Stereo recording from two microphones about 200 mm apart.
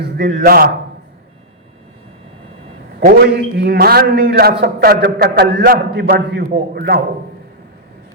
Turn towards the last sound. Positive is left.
turn(degrees=-50)  # may be behind; listen again after turning